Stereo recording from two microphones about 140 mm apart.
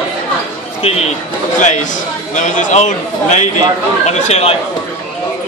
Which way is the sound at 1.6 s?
60° left (ahead or behind).